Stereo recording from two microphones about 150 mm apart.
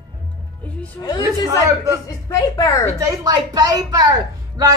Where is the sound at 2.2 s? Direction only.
25° left (ahead or behind).